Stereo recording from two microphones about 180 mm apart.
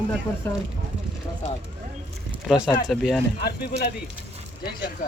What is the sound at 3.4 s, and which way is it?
Speech, 60° left (ahead or behind).